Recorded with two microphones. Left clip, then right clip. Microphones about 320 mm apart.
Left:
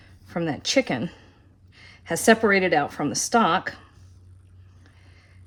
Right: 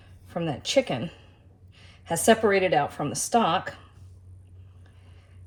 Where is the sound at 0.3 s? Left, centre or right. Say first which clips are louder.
Left 3 dB; left.